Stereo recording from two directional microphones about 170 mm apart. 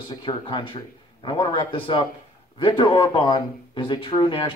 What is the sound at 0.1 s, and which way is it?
Speech, 25° left (ahead or behind).